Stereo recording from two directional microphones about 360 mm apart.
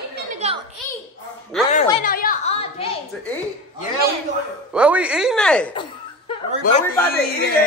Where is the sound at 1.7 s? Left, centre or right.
Centre.